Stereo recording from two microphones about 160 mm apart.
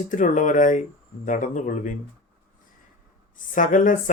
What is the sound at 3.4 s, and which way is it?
Speech, 55° left (ahead or behind).